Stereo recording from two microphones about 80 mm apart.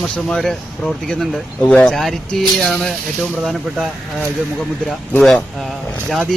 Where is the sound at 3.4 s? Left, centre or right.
Centre.